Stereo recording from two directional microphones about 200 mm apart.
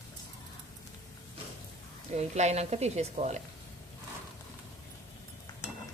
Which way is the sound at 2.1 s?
35° right (ahead or behind).